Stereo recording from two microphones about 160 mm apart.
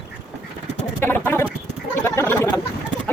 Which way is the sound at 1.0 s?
15° left (ahead or behind).